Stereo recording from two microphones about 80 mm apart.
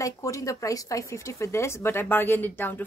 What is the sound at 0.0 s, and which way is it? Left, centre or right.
Speech, left.